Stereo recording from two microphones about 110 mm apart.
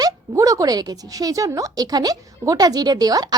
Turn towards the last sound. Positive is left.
turn(degrees=-35)  # may be behind; listen again after turning